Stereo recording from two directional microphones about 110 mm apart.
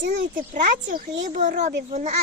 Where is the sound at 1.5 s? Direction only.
90° right.